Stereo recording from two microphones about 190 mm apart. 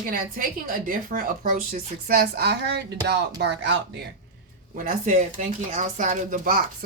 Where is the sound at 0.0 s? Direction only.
45° right (ahead or behind); by 4.0 s 65° right (ahead or behind).